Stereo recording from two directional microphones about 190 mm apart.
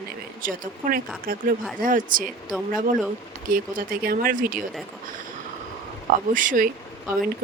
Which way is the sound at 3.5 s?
50° right (ahead or behind).